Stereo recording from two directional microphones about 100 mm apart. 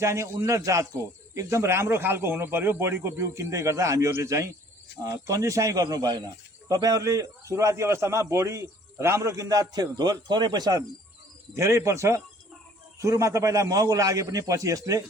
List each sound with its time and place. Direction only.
0.0 s speech: 30° right (ahead or behind)
11.5 s speech: 25° right (ahead or behind)